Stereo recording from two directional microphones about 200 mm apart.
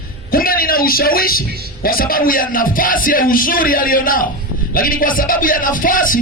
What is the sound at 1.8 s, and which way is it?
Speech, 45° left (ahead or behind).